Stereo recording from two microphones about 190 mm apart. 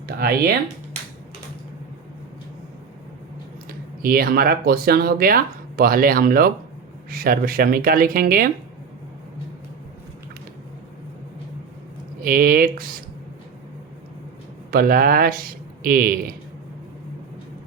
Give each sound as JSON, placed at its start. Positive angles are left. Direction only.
{"t": 0.2, "sound": "speech", "side_deg": -55}
{"t": 3.7, "sound": "speech", "side_deg": -50}
{"t": 12.2, "sound": "speech", "side_deg": -50}
{"t": 14.7, "sound": "speech", "side_deg": -50}